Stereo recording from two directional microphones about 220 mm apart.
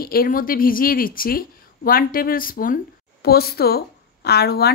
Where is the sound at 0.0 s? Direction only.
40° left (ahead or behind).